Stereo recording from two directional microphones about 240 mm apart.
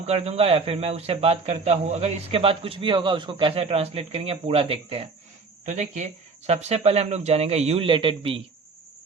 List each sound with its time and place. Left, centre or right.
0.0 s a man's voice: right